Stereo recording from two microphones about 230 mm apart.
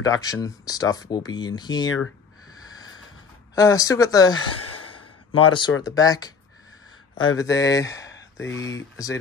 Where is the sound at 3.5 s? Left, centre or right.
Centre.